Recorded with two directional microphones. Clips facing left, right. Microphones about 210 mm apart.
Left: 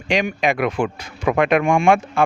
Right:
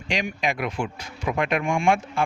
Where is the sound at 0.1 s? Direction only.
60° left (ahead or behind).